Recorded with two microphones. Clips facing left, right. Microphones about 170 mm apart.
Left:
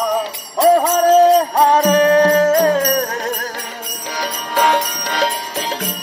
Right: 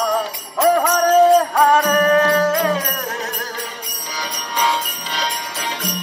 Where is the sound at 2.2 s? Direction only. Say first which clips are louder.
Left 4 dB; 35° left (ahead or behind).